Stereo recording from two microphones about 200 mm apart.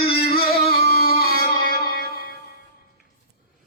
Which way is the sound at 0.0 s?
50° left (ahead or behind).